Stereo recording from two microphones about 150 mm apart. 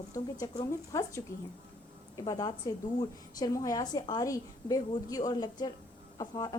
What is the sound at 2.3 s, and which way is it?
A woman's voice, 25° left (ahead or behind).